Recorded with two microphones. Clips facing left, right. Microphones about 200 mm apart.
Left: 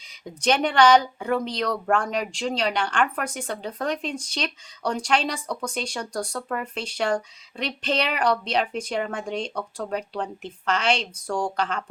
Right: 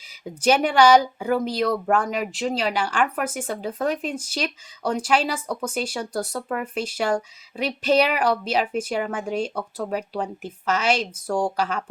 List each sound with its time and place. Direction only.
0.4 s a woman's voice: 10° right (ahead or behind)